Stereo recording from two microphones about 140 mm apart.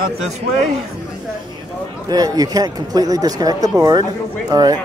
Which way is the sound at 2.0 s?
25° right (ahead or behind).